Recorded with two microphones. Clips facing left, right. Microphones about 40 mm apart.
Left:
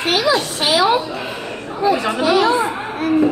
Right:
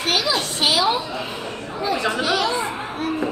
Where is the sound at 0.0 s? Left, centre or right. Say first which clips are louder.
Left 5 dB; left.